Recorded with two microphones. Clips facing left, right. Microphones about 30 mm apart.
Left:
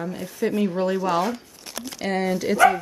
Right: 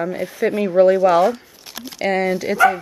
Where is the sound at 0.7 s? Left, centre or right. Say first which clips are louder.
Right 10 dB; centre.